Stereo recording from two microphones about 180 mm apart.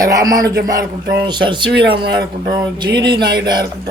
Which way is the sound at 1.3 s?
25° right (ahead or behind).